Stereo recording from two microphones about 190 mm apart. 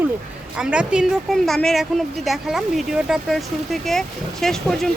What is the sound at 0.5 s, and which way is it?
A woman's voice, 5° right (ahead or behind).